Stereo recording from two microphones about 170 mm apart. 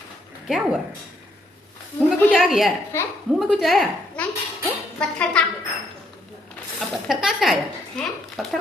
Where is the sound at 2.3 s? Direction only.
5° right (ahead or behind).